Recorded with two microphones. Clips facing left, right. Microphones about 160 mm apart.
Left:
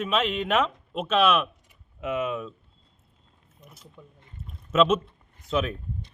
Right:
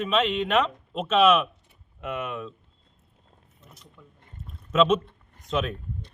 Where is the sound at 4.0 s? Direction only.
25° left (ahead or behind).